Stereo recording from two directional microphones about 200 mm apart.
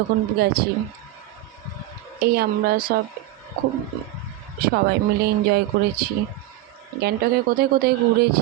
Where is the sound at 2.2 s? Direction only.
50° right (ahead or behind).